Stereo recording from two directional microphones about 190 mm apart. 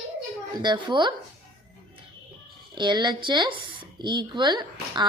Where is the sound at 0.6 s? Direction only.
25° right (ahead or behind).